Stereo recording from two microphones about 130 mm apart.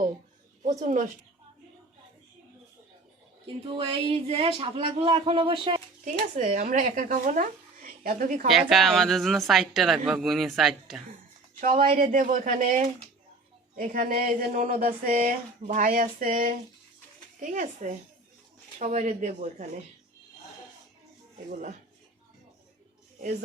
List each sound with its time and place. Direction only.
0.6 s speech: 70° right (ahead or behind)
3.4 s a man's voice: 45° right (ahead or behind)
6.3 s speech: 90° right
8.4 s a woman's voice: centre (ahead or behind)
11.6 s speech: 85° right
17.4 s speech: 80° right
21.5 s speech: 70° right (ahead or behind)